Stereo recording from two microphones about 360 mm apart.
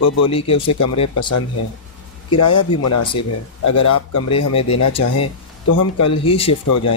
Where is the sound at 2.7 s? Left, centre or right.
Left.